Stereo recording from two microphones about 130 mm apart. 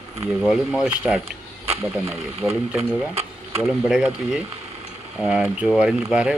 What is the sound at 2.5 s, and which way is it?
Speech, 15° right (ahead or behind).